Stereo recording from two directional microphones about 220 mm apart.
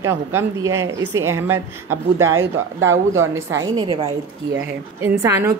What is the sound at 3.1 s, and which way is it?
A woman's voice, 15° right (ahead or behind).